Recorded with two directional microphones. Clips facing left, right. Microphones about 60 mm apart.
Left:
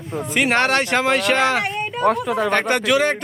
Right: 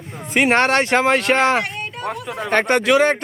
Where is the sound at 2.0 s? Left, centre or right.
Left.